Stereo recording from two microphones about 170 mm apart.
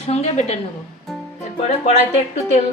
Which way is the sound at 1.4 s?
40° left (ahead or behind).